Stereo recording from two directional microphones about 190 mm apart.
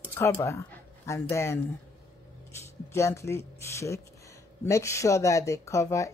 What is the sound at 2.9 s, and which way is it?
Speech, 15° left (ahead or behind).